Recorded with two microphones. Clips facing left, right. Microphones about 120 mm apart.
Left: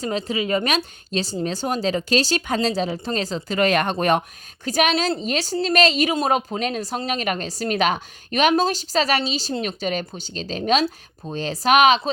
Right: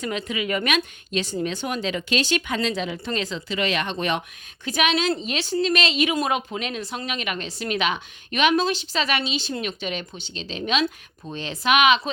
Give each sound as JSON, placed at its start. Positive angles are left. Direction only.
{"t": 0.0, "sound": "speech", "side_deg": 35}